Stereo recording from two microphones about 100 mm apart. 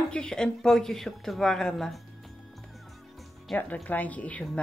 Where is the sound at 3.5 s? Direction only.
15° left (ahead or behind).